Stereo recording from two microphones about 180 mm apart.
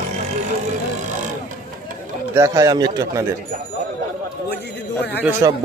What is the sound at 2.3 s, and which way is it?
Speech, 20° right (ahead or behind).